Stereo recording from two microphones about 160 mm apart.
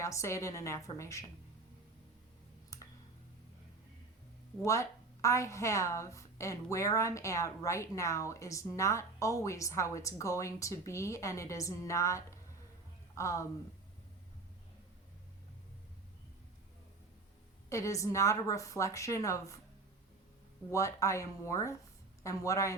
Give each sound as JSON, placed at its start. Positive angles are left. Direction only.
{"t": 0.0, "sound": "a woman's voice", "side_deg": 20}
{"t": 2.7, "sound": "clicking", "side_deg": 20}
{"t": 4.6, "sound": "a woman's voice", "side_deg": 20}
{"t": 17.7, "sound": "a woman's voice", "side_deg": 20}
{"t": 20.7, "sound": "a woman's voice", "side_deg": 20}